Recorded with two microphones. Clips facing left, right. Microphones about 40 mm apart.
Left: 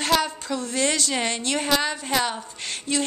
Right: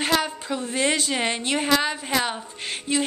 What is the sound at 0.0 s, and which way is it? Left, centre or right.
A woman's voice, centre.